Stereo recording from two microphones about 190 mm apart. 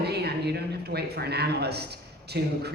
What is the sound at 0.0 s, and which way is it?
Speech, 60° right (ahead or behind).